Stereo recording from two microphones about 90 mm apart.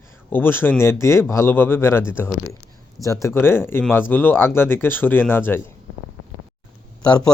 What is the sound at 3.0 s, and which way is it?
Speech, 35° left (ahead or behind).